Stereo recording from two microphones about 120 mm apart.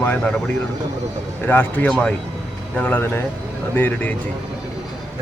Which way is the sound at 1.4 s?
15° left (ahead or behind).